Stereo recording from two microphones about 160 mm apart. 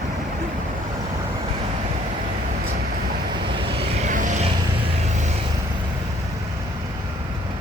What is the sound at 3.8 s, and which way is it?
Vehicle, 50° right (ahead or behind).